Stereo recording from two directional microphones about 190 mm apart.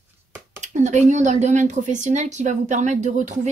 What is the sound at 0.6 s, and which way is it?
Speech, 40° right (ahead or behind).